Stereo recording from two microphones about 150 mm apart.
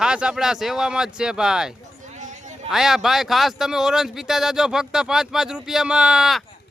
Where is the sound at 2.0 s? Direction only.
55° right (ahead or behind).